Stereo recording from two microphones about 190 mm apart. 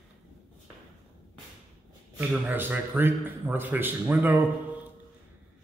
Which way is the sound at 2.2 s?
10° right (ahead or behind).